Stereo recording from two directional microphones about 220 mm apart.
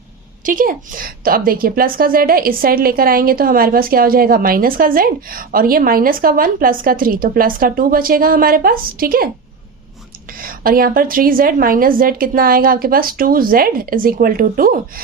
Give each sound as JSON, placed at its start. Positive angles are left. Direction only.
{"t": 0.4, "sound": "a woman's voice", "side_deg": -40}
{"t": 10.3, "sound": "a woman's voice", "side_deg": -40}